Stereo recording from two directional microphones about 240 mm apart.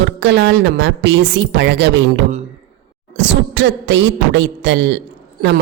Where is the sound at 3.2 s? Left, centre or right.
Right.